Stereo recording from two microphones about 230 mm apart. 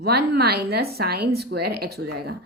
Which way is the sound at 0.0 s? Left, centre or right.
Right.